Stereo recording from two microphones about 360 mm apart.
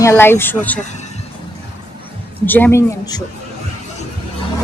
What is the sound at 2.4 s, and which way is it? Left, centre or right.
Speech, centre.